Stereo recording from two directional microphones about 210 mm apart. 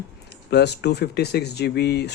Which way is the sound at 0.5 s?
50° left (ahead or behind).